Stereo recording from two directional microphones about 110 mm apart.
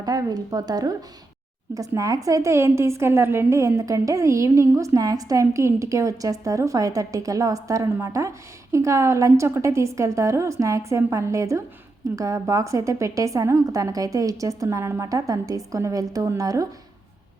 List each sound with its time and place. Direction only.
0.0 s a woman's voice: 35° right (ahead or behind)